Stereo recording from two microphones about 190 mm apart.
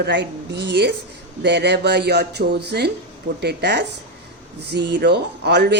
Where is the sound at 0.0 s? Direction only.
65° right (ahead or behind).